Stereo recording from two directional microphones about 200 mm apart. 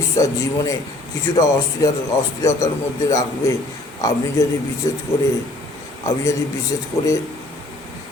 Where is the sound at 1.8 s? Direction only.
15° left (ahead or behind).